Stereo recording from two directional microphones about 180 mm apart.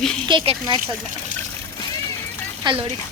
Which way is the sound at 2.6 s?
25° right (ahead or behind).